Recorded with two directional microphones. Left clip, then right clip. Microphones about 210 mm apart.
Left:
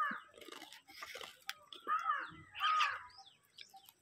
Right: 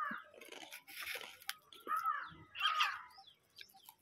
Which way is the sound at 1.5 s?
15° right (ahead or behind).